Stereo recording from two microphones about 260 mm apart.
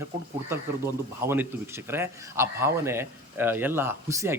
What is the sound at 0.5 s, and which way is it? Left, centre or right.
A man's voice, centre.